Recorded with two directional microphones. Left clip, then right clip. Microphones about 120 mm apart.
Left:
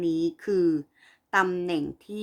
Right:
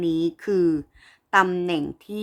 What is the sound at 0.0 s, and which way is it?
A woman's voice, 35° right (ahead or behind).